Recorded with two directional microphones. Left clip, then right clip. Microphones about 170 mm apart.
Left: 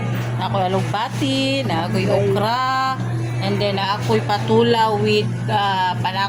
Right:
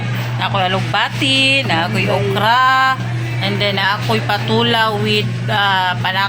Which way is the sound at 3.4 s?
Centre (ahead or behind).